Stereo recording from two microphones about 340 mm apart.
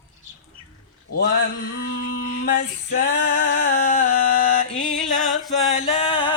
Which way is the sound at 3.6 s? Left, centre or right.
Left.